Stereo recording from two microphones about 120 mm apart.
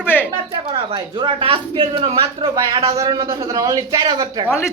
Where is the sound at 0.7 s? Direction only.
50° right (ahead or behind).